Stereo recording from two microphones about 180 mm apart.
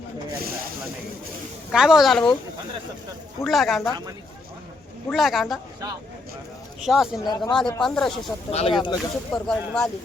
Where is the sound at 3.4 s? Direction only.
Centre (ahead or behind).